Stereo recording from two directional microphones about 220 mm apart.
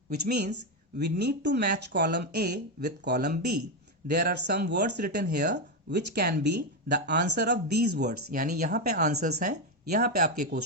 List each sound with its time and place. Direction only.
0.1 s speech: 45° right (ahead or behind)